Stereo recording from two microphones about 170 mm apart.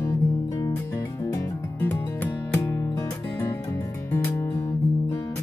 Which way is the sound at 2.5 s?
15° left (ahead or behind).